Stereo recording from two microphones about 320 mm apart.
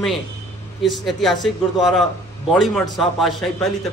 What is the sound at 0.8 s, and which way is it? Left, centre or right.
A man's voice, centre.